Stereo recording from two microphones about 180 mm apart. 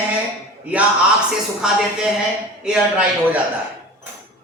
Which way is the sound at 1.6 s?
5° right (ahead or behind).